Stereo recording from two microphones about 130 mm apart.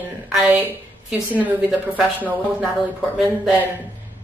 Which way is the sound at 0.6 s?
10° right (ahead or behind).